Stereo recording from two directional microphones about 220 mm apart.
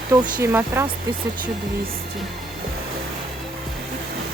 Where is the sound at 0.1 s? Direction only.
15° right (ahead or behind).